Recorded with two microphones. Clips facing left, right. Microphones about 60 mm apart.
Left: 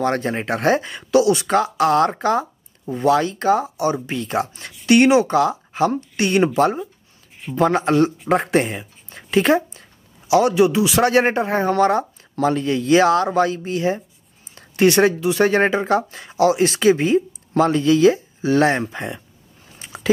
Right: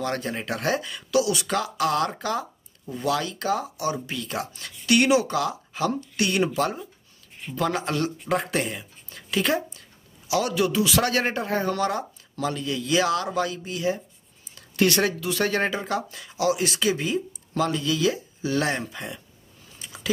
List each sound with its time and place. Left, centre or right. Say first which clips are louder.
0.0 s speech: left 7 dB; left
14.5 s speech: left 6 dB; left
19.7 s a sound: left 5 dB; left